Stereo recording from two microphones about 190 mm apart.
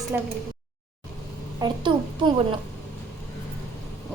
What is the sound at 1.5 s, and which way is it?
Speech, 20° right (ahead or behind).